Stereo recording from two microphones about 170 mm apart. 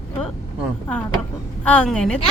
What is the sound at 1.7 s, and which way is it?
Speech, 5° left (ahead or behind).